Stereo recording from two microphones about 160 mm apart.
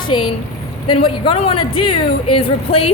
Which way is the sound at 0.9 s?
35° left (ahead or behind).